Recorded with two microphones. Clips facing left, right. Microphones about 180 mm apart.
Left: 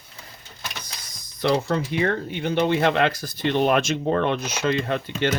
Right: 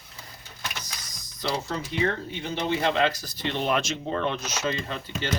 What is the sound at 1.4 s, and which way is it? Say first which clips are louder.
Speech: left 8 dB; 60° left (ahead or behind).